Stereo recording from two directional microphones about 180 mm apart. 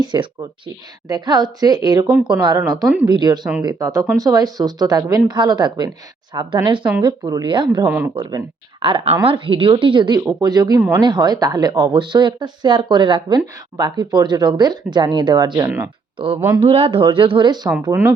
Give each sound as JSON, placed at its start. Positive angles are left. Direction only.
{"t": 0.0, "sound": "speech", "side_deg": -25}
{"t": 2.0, "sound": "speech", "side_deg": -5}
{"t": 2.4, "sound": "speech", "side_deg": -25}
{"t": 2.8, "sound": "speech", "side_deg": -10}
{"t": 3.1, "sound": "speech", "side_deg": -25}
{"t": 7.9, "sound": "speech", "side_deg": -10}
{"t": 8.1, "sound": "speech", "side_deg": -25}
{"t": 15.6, "sound": "speech", "side_deg": -10}
{"t": 16.1, "sound": "speech", "side_deg": -30}